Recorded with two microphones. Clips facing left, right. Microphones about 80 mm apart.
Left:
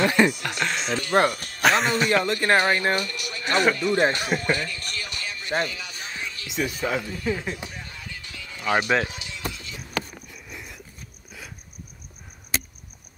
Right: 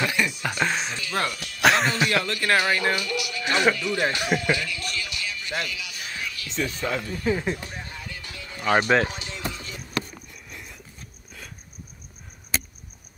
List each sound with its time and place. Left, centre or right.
0.0 s speech: left
0.4 s speech: centre
0.9 s speech: left
1.6 s speech: centre
2.0 s speech: left
4.4 s music: left
6.4 s speech: centre
7.2 s speech: centre
8.6 s speech: centre
9.0 s music: right
10.3 s a sound: centre